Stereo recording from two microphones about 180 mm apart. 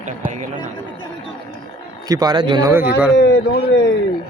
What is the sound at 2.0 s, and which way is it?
Speech, 20° right (ahead or behind).